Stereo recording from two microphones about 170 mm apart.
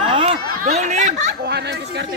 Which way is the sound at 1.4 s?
75° right (ahead or behind).